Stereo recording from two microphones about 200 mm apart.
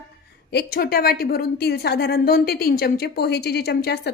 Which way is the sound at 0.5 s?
50° left (ahead or behind).